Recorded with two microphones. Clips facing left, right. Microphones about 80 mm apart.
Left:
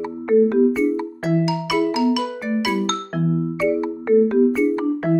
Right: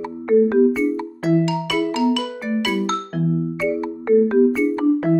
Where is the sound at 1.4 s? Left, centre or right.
Centre.